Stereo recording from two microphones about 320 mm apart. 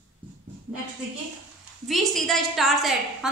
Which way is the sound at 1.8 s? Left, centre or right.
Centre.